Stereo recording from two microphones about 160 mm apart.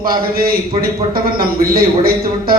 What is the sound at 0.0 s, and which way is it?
A man's voice, 65° right (ahead or behind).